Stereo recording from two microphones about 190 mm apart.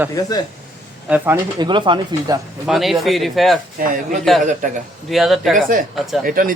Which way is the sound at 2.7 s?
Centre (ahead or behind).